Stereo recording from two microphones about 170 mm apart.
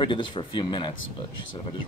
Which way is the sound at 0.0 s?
30° left (ahead or behind).